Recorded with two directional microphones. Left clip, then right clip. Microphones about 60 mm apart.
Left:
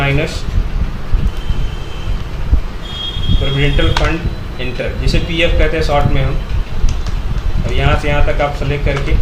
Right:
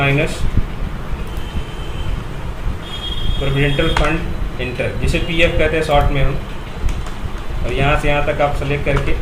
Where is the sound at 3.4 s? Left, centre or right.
Centre.